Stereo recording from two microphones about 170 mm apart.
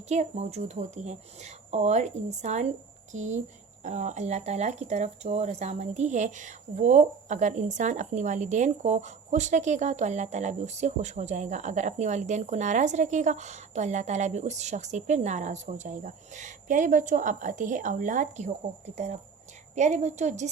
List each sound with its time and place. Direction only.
0.1 s a woman's voice: 40° right (ahead or behind)